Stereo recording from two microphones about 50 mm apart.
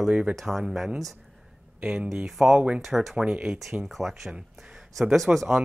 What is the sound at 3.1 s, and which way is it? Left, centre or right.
Speech, centre.